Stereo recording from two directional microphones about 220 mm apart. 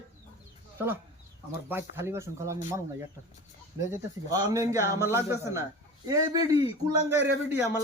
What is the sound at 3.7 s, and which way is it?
Speech, 15° right (ahead or behind).